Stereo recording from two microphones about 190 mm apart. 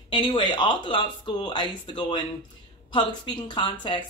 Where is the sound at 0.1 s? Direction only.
25° left (ahead or behind).